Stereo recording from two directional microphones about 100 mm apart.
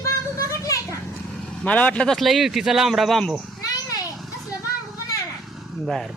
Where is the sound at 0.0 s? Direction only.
35° left (ahead or behind).